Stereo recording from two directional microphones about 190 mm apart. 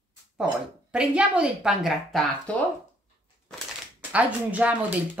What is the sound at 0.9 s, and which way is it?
A woman's voice, 5° right (ahead or behind).